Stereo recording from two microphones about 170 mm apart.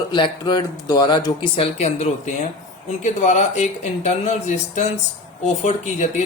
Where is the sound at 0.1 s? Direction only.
25° left (ahead or behind).